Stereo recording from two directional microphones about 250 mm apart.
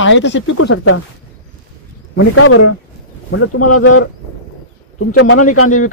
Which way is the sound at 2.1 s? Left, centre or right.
Left.